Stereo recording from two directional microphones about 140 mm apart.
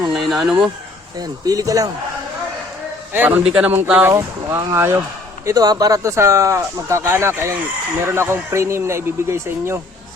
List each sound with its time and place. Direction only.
0.3 s speech: centre (ahead or behind)
1.2 s speech: 25° right (ahead or behind)
3.1 s a man's voice: 15° right (ahead or behind)